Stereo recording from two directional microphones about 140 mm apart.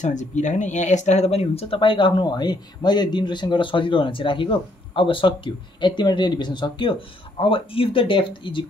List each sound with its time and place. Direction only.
0.0 s speech: 60° left (ahead or behind); by 8.6 s 35° left (ahead or behind)